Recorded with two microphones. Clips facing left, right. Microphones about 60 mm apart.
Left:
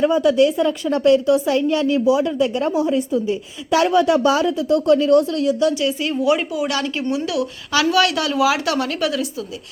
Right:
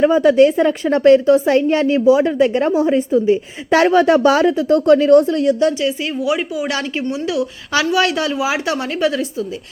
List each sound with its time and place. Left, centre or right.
0.0 s a woman's voice: right
6.1 s speech: centre
6.7 s a woman's voice: right